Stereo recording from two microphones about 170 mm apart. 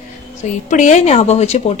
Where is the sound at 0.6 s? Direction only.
45° left (ahead or behind).